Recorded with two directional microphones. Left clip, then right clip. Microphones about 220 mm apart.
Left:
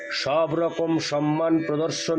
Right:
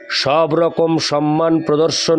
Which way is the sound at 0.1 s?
45° right (ahead or behind).